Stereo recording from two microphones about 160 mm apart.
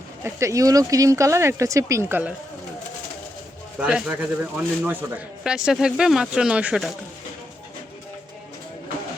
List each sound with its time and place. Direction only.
0.3 s speech: 20° right (ahead or behind)
3.8 s speech: 5° right (ahead or behind)